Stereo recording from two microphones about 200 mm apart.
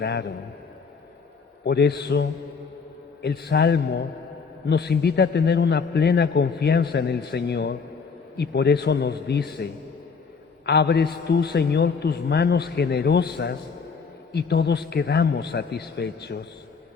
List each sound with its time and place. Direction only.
0.0 s a man's voice: 55° left (ahead or behind)
1.6 s a man's voice: 55° left (ahead or behind)
10.7 s a man's voice: 55° left (ahead or behind)